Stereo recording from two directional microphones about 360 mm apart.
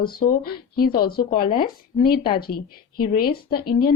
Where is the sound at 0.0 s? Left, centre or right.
Left.